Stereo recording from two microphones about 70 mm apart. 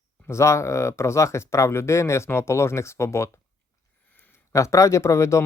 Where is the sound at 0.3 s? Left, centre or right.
Left.